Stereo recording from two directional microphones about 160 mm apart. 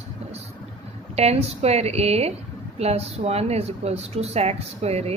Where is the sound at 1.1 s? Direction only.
40° right (ahead or behind).